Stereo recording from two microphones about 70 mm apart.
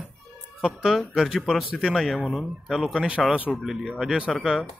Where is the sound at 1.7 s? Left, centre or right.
Centre.